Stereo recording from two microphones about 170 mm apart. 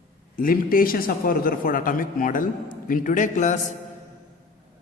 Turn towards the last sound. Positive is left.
turn(degrees=45)  # may be behind; listen again after turning